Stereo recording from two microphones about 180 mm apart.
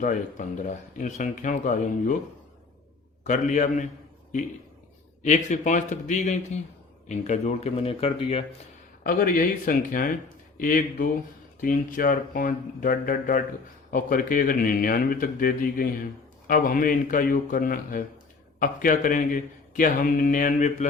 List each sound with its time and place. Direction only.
0.0 s a man's voice: 45° left (ahead or behind)
3.2 s a man's voice: 45° left (ahead or behind)
5.2 s a man's voice: 40° left (ahead or behind)
9.0 s a man's voice: 50° left (ahead or behind)